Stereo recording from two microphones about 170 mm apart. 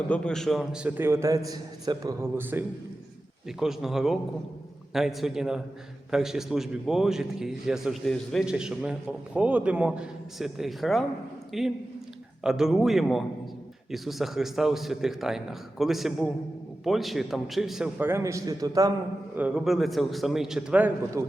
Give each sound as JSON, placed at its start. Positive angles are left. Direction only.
{"t": 0.1, "sound": "a man's voice", "side_deg": 5}
{"t": 18.0, "sound": "a man's voice", "side_deg": -15}
{"t": 19.4, "sound": "a man's voice", "side_deg": -5}